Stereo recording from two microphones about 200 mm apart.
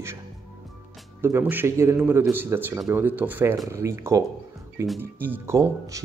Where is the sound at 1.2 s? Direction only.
10° right (ahead or behind).